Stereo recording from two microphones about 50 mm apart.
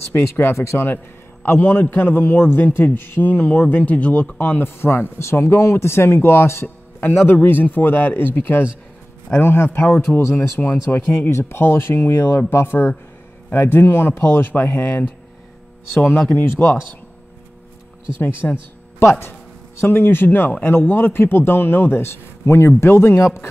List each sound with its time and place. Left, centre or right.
0.4 s speech: left
0.8 s a man's voice: left
7.0 s a man's voice: left
11.2 s a man's voice: left
18.4 s speech: left
18.9 s speech: left
19.8 s a man's voice: left